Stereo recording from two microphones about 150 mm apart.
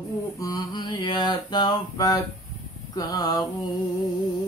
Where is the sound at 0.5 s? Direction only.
30° left (ahead or behind).